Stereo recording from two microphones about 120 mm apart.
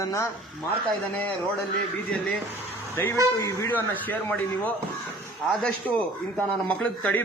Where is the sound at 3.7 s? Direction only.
15° left (ahead or behind).